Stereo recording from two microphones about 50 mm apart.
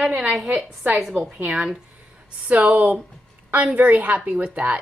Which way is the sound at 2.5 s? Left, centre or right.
Right.